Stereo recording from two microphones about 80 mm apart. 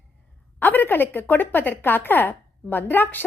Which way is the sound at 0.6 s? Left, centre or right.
Left.